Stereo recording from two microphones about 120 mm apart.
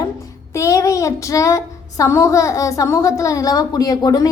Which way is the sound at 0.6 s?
25° left (ahead or behind).